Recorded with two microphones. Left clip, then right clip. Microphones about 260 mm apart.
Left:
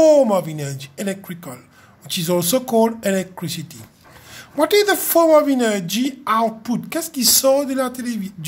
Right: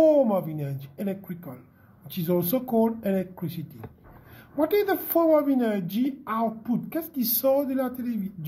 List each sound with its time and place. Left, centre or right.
0.0 s a woman's voice: left